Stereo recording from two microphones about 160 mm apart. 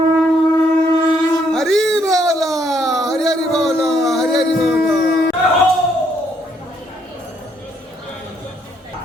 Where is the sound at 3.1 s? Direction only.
Centre (ahead or behind).